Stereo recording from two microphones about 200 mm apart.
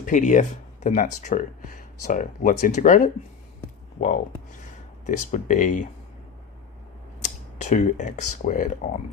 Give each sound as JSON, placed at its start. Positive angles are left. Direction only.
{"t": 0.0, "sound": "speech", "side_deg": 40}
{"t": 5.0, "sound": "speech", "side_deg": 40}
{"t": 7.6, "sound": "speech", "side_deg": 40}